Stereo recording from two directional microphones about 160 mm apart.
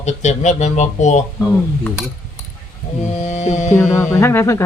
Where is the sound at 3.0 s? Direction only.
45° left (ahead or behind).